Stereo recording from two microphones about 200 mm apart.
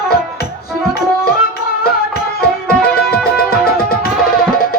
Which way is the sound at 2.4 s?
50° left (ahead or behind).